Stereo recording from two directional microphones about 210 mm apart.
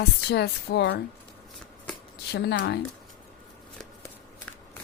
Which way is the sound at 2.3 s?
50° left (ahead or behind).